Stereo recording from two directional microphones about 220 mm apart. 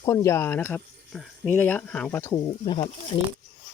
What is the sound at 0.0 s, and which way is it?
Speech, 15° left (ahead or behind).